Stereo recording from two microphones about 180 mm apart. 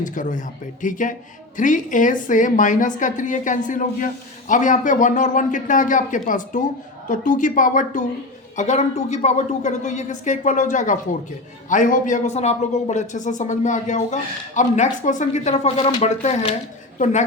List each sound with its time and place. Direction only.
0.0 s a woman's voice: 45° left (ahead or behind)